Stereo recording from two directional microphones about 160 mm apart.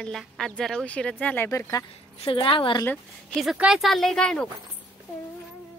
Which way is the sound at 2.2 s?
35° left (ahead or behind).